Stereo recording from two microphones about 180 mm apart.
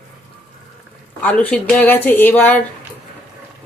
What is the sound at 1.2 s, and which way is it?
Speech, 10° left (ahead or behind).